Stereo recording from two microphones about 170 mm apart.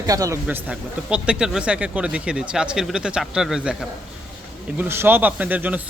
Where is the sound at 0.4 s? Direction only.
10° right (ahead or behind).